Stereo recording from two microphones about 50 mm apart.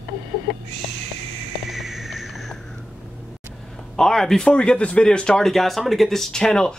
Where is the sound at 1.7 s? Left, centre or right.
Centre.